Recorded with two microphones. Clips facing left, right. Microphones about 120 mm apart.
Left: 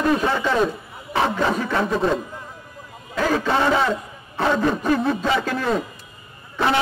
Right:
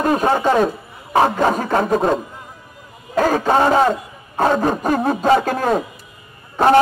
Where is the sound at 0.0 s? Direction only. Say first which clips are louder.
Right 4 dB; 45° right (ahead or behind).